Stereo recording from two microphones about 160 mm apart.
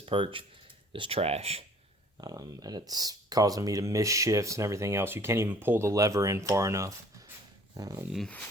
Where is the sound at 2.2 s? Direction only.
25° right (ahead or behind).